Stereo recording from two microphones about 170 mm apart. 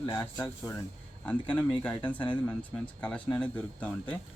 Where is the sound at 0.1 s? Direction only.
15° left (ahead or behind).